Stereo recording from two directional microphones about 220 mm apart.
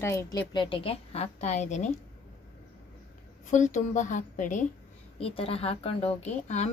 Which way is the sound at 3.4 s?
35° left (ahead or behind).